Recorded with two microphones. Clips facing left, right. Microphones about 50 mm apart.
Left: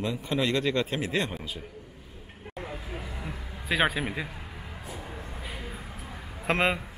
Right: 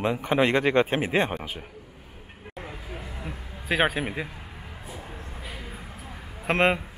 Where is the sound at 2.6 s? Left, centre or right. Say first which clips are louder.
Left 1 dB; centre.